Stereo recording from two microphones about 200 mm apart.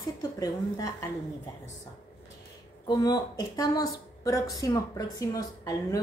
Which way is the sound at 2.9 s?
20° left (ahead or behind).